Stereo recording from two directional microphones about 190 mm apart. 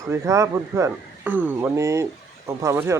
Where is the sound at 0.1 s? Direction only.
15° right (ahead or behind).